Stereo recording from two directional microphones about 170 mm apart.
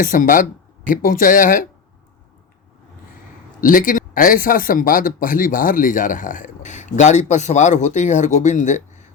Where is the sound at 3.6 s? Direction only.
55° left (ahead or behind).